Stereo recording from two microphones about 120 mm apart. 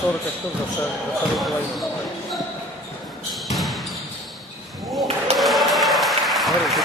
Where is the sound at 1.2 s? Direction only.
Centre (ahead or behind).